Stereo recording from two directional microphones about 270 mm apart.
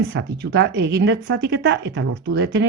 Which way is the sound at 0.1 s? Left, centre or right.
Right.